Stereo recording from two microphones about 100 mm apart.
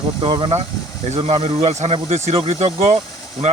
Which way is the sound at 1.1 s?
90° right.